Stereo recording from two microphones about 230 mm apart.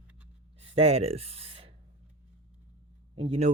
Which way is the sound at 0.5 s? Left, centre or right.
Right.